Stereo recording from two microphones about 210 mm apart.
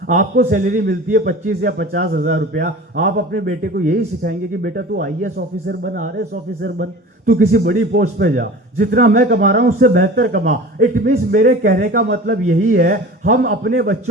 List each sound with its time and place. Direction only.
0.1 s a man's voice: 40° right (ahead or behind)